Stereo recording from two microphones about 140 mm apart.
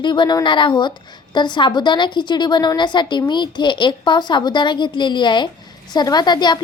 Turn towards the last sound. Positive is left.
turn(degrees=30)  # may be behind; listen again after turning